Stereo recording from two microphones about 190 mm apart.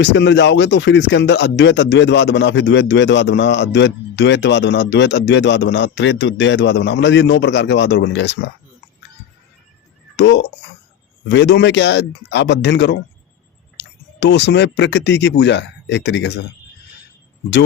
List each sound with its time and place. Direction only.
0.0 s speech: 70° left (ahead or behind)
10.2 s speech: 65° left (ahead or behind)